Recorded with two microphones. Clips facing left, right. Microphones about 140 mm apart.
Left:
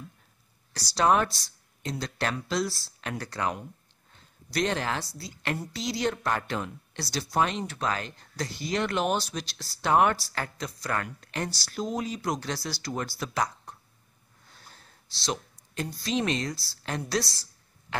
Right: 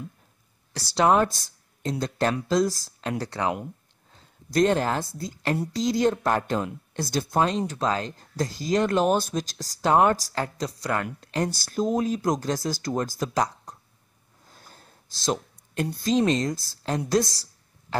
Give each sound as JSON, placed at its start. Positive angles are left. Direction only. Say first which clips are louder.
{"t": 0.9, "sound": "speech", "louder": "right 3 dB", "side_deg": -25}
{"t": 1.3, "sound": "speech", "louder": "right 1 dB", "side_deg": -45}
{"t": 3.0, "sound": "speech", "louder": "right 4 dB", "side_deg": -30}
{"t": 4.5, "sound": "speech", "louder": "right 7 dB", "side_deg": -45}
{"t": 7.3, "sound": "speech", "louder": "right 3 dB", "side_deg": -35}
{"t": 8.2, "sound": "speech", "louder": "right 5 dB", "side_deg": -40}
{"t": 9.8, "sound": "speech", "louder": "right 3 dB", "side_deg": -30}
{"t": 11.4, "sound": "speech", "louder": "right 7 dB", "side_deg": -45}
{"t": 14.5, "sound": "a sound", "louder": "right 3 dB", "side_deg": -45}
{"t": 16.1, "sound": "speech", "louder": "right 6 dB", "side_deg": -35}